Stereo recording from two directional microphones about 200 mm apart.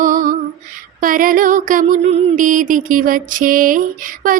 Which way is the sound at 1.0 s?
45° right (ahead or behind).